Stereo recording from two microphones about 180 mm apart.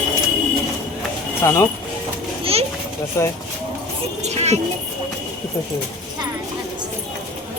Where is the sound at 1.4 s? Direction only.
15° left (ahead or behind).